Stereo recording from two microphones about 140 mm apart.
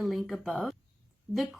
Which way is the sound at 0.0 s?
Centre (ahead or behind).